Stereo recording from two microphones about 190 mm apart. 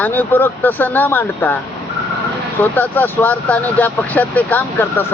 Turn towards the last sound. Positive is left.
turn(degrees=10)  # may be behind; listen again after turning